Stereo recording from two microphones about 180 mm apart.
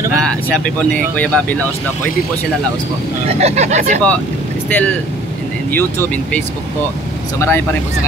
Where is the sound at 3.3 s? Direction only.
35° right (ahead or behind).